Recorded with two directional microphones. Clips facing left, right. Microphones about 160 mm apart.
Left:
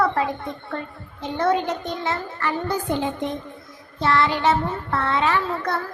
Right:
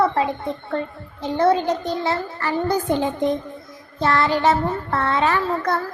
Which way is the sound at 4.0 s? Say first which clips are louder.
Right 2 dB; 40° right (ahead or behind).